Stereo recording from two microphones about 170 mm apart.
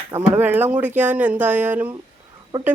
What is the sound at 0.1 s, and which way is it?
Speech, 10° right (ahead or behind).